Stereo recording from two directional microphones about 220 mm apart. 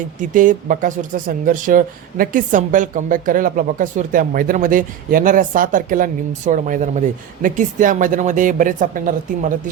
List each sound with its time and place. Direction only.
0.2 s speech: 35° right (ahead or behind)